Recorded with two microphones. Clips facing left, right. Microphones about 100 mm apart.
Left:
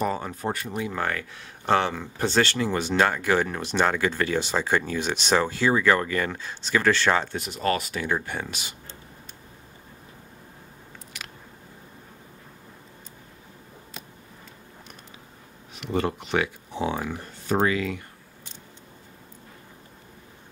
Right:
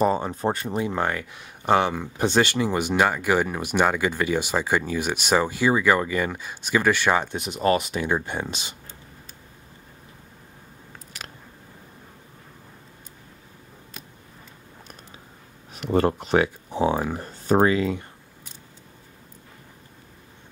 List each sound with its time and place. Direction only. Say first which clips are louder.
0.0 s speech: right 5 dB; 25° right (ahead or behind)
15.7 s speech: right 5 dB; 45° right (ahead or behind)